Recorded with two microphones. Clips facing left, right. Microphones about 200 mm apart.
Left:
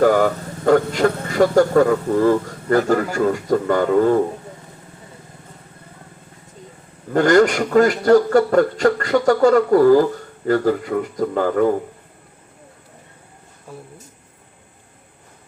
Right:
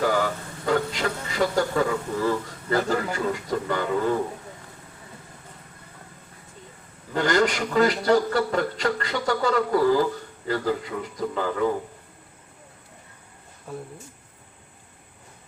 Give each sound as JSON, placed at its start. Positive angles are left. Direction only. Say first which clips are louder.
{"t": 0.0, "sound": "a man's voice", "louder": "left 9 dB", "side_deg": 50}
{"t": 7.1, "sound": "a man's voice", "louder": "left 8 dB", "side_deg": 50}